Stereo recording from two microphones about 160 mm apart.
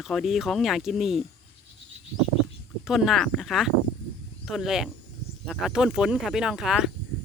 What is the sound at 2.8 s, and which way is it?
Speech, centre (ahead or behind).